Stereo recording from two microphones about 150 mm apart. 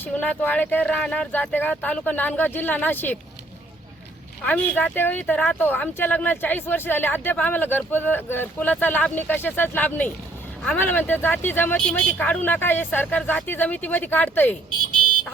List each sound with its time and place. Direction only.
0.0 s speech: 10° left (ahead or behind)
4.4 s speech: 10° left (ahead or behind)
14.9 s car alarm: 30° right (ahead or behind)